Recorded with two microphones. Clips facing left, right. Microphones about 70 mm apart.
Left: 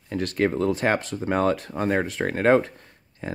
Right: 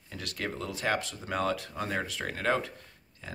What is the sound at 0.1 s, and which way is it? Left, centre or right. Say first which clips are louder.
Speech: left 13 dB; left.